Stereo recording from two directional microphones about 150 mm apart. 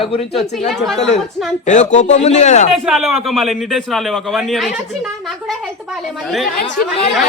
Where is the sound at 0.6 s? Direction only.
Centre (ahead or behind).